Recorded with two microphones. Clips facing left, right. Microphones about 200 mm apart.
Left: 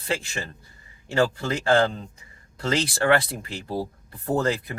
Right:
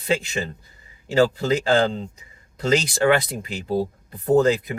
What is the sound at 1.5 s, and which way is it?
Speech, 25° right (ahead or behind).